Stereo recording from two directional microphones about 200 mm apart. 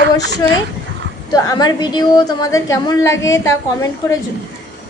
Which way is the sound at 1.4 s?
20° left (ahead or behind).